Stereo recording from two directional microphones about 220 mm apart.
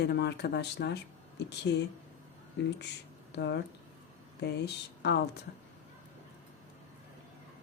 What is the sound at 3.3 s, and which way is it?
Speech, 50° left (ahead or behind).